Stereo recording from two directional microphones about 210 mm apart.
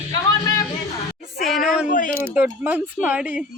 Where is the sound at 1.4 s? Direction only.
Centre (ahead or behind).